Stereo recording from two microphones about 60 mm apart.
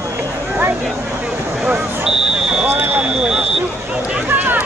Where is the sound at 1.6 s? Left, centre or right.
Centre.